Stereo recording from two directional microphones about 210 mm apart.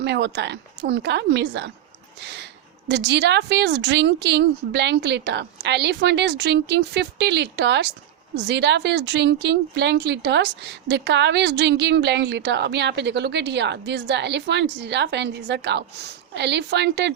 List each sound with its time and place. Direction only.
0.0 s speech: 55° right (ahead or behind)
2.2 s a sound: 55° right (ahead or behind)
2.9 s a woman's voice: 55° right (ahead or behind)